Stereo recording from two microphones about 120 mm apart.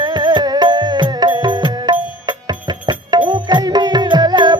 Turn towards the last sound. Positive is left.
turn(degrees=-40)  # may be behind; listen again after turning